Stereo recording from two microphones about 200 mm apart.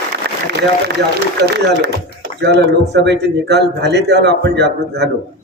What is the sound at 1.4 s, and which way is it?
A man's voice, 55° right (ahead or behind).